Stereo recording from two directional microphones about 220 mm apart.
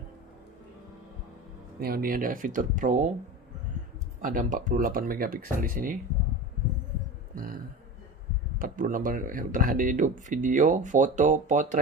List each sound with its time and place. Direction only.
1.8 s speech: 40° right (ahead or behind)
4.2 s speech: 35° right (ahead or behind)
8.5 s speech: 40° right (ahead or behind)